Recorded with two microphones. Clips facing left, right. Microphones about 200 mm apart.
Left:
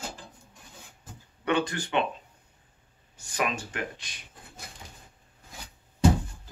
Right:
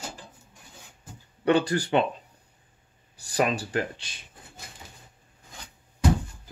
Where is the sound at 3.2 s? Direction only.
35° right (ahead or behind).